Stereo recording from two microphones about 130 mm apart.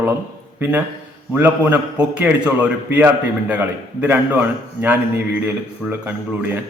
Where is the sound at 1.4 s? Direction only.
15° right (ahead or behind).